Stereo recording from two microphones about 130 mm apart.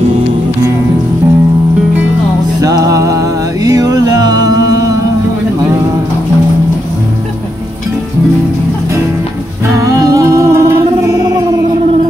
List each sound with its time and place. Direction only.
2.6 s music: 25° right (ahead or behind)
9.8 s music: 25° right (ahead or behind)